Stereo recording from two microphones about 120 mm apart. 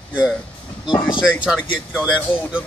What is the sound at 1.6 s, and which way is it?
Speech, 15° left (ahead or behind).